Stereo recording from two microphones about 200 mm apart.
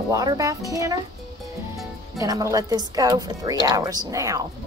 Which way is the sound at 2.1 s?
15° right (ahead or behind).